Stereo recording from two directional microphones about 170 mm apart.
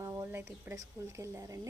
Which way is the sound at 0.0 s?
15° right (ahead or behind).